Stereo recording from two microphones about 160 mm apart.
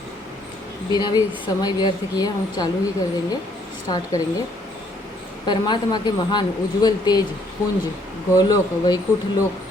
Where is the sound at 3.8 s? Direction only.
25° left (ahead or behind).